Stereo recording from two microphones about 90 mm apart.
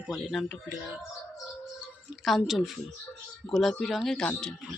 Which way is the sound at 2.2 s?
Centre (ahead or behind).